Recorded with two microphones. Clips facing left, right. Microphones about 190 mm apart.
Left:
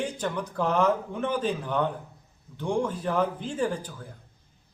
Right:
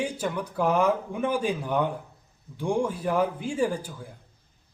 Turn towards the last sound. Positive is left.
turn(degrees=-10)  # may be behind; listen again after turning